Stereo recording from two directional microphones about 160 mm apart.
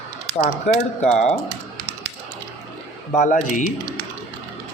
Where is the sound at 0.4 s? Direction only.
50° left (ahead or behind).